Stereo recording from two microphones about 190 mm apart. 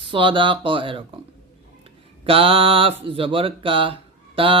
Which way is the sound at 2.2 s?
30° right (ahead or behind).